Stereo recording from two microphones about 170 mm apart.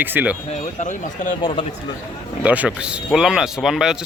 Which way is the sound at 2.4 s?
10° right (ahead or behind).